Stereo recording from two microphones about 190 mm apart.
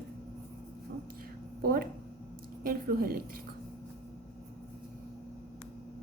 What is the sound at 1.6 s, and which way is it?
A woman's voice, 50° right (ahead or behind).